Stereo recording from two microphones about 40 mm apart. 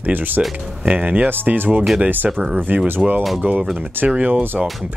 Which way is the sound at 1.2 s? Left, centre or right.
Right.